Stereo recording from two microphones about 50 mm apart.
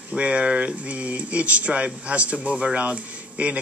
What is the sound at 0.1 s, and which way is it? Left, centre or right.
Speech, right.